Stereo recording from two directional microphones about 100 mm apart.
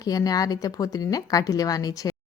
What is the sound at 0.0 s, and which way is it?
A woman's voice, 40° left (ahead or behind).